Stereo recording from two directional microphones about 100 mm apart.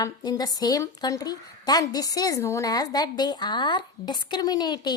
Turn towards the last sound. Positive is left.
turn(degrees=45)  # may be behind; listen again after turning